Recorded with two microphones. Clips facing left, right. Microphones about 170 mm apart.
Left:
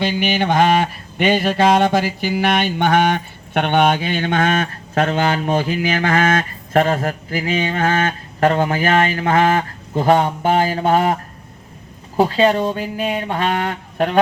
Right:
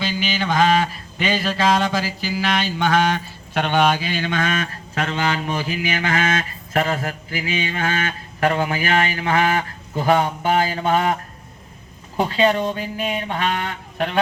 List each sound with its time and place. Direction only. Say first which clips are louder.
0.0 s mantra: left 5 dB; 55° left (ahead or behind)
9.9 s a man's voice: left 3 dB; 30° left (ahead or behind)